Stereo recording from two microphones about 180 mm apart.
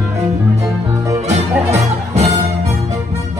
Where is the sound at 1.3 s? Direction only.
40° right (ahead or behind).